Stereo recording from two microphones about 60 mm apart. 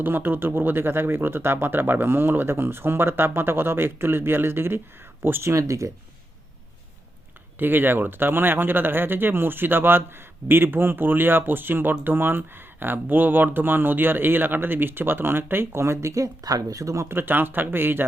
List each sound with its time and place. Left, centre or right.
0.0 s speech: right
5.5 s speech: right
7.6 s speech: right
16.1 s speech: right
17.1 s speech: right